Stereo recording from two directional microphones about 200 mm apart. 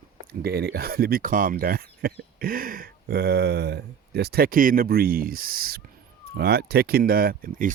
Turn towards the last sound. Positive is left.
turn(degrees=-45)  # may be behind; listen again after turning